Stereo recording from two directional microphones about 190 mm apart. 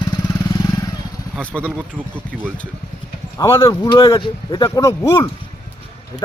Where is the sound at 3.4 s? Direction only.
15° left (ahead or behind).